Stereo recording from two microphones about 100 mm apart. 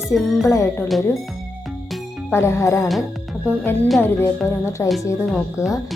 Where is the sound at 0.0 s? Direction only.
Centre (ahead or behind).